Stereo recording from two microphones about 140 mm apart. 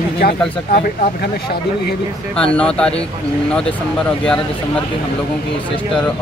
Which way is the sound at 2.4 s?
5° left (ahead or behind).